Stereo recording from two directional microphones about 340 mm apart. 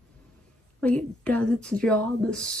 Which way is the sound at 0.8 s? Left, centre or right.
Centre.